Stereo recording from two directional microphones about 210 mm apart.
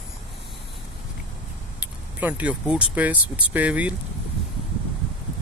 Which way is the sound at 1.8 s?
5° right (ahead or behind).